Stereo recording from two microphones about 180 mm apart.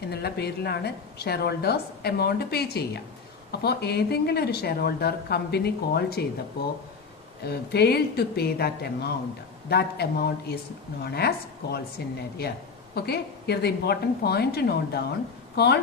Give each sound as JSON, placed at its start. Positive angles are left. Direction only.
{"t": 0.1, "sound": "speech", "side_deg": 65}
{"t": 7.4, "sound": "speech", "side_deg": 65}
{"t": 12.9, "sound": "a woman's voice", "side_deg": 60}